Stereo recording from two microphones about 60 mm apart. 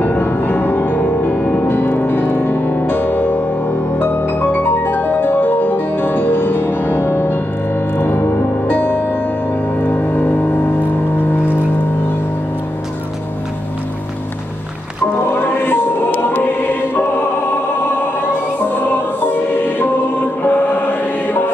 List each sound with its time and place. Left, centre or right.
0.0 s music: left
1.7 s music: left
15.1 s music: left
20.4 s music: left